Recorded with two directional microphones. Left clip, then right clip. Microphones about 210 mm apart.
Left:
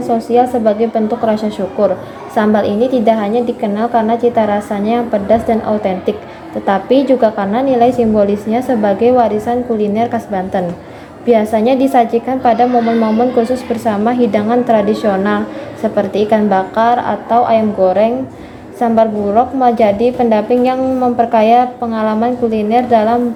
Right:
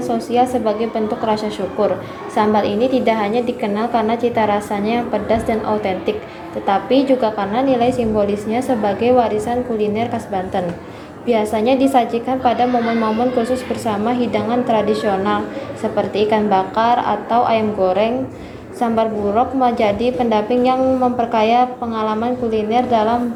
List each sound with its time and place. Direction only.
0.1 s a woman's voice: 30° left (ahead or behind)